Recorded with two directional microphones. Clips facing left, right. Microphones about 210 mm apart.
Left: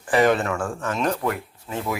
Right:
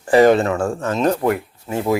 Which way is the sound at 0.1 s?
30° right (ahead or behind).